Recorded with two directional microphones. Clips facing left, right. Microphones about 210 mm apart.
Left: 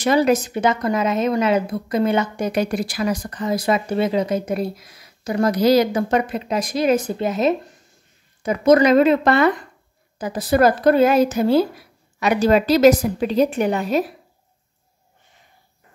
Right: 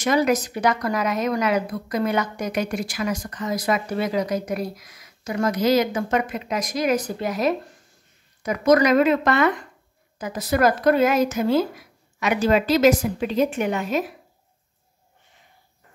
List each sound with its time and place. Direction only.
0.0 s a woman's voice: 30° left (ahead or behind)